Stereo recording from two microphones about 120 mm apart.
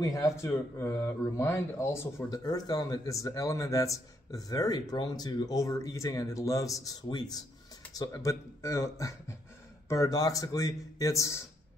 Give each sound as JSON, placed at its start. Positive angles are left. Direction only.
{"t": 0.0, "sound": "speech", "side_deg": 25}
{"t": 2.4, "sound": "speech", "side_deg": 35}